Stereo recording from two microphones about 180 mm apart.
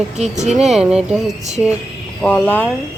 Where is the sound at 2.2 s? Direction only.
10° left (ahead or behind).